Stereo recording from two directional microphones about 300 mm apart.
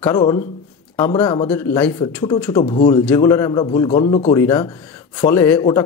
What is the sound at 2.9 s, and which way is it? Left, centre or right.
Speech, centre.